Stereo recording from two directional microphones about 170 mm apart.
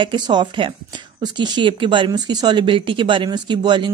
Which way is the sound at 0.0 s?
25° right (ahead or behind).